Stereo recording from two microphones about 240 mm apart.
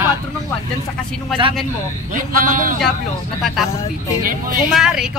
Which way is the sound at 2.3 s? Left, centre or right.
Right.